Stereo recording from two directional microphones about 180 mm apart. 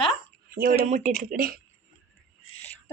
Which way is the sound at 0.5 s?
55° right (ahead or behind).